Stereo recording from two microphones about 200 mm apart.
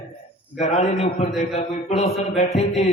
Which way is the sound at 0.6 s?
35° left (ahead or behind).